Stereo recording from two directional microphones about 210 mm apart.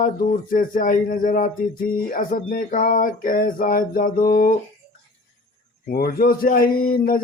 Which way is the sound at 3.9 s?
45° left (ahead or behind).